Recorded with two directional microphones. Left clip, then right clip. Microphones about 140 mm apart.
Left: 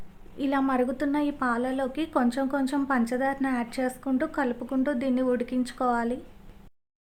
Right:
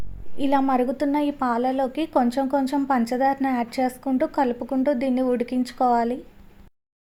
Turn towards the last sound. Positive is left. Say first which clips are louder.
# right 6 dB
turn(degrees=-20)  # may be behind; listen again after turning